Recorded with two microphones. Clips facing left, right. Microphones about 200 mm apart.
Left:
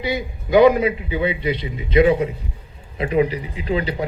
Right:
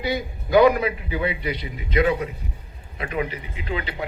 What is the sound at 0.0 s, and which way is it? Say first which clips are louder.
A man's voice: left 2 dB; 20° left (ahead or behind).